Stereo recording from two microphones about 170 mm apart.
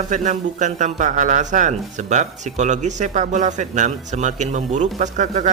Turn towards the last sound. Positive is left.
turn(degrees=-45)  # may be behind; listen again after turning